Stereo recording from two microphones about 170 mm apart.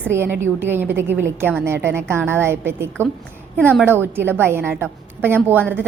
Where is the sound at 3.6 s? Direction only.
5° left (ahead or behind).